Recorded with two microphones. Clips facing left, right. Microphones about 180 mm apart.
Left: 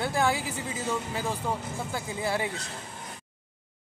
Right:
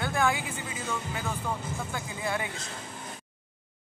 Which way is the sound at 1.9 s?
30° left (ahead or behind).